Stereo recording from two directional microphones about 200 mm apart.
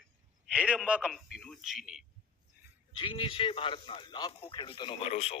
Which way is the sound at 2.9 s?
25° left (ahead or behind).